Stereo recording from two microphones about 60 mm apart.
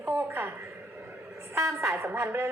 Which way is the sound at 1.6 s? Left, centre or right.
Right.